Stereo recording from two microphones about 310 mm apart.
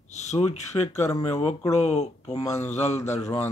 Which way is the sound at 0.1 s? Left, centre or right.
Left.